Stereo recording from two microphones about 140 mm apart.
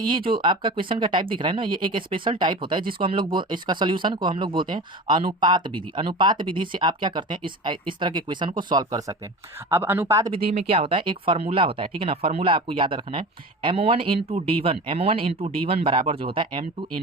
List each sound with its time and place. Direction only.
0.3 s speech: 35° right (ahead or behind); by 10.3 s 20° right (ahead or behind)
10.3 s speech: 40° right (ahead or behind)